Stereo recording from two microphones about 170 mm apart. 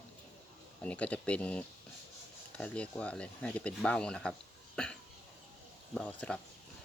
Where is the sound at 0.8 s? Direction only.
10° left (ahead or behind).